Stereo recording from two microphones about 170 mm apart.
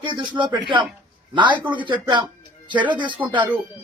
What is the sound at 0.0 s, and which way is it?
Speech, 25° right (ahead or behind).